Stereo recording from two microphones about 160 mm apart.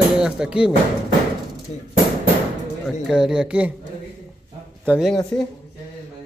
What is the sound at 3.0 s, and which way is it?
Speech, 5° right (ahead or behind).